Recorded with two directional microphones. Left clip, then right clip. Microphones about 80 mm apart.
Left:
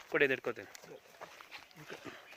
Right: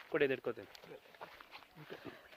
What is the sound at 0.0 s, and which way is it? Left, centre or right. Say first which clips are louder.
Speech: left 4 dB; centre.